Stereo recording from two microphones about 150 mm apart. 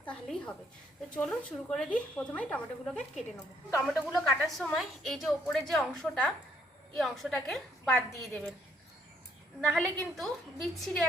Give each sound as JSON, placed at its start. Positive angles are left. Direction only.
{"t": 0.0, "sound": "a woman's voice", "side_deg": 5}
{"t": 4.3, "sound": "a woman's voice", "side_deg": 0}
{"t": 9.6, "sound": "a woman's voice", "side_deg": 5}